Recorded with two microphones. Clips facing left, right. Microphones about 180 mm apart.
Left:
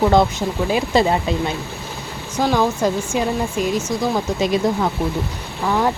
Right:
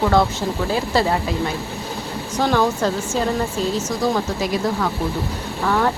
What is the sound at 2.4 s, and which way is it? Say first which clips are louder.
Speech: left 1 dB; 10° left (ahead or behind).